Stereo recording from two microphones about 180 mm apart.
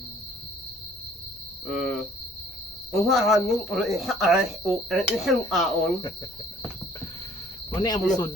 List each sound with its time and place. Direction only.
1.6 s cricket: centre (ahead or behind)
3.1 s speech: centre (ahead or behind)
7.7 s speech: 25° left (ahead or behind)